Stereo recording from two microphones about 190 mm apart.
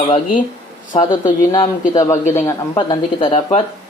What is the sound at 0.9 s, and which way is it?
Speech, 25° left (ahead or behind).